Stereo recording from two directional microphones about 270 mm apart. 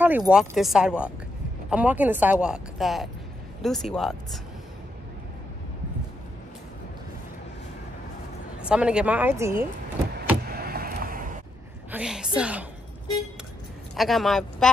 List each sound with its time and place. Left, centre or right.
0.0 s speech: centre
8.6 s speech: centre
10.5 s a sound: right
11.9 s speech: centre
13.9 s speech: centre